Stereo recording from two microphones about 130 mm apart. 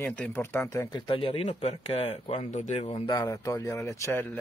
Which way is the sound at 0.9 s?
45° left (ahead or behind).